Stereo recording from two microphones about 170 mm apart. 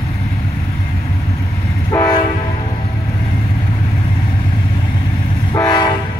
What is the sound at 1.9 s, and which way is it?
Train, 20° left (ahead or behind).